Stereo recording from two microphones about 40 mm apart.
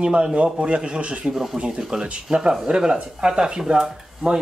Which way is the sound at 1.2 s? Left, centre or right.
Centre.